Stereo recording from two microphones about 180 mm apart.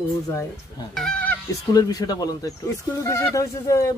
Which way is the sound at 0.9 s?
Centre (ahead or behind).